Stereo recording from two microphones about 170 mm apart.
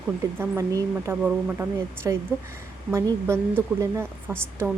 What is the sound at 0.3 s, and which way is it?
A woman's voice, 15° right (ahead or behind).